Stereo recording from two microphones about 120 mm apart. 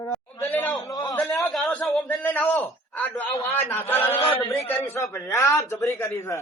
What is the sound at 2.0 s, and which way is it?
A man's voice, 15° left (ahead or behind).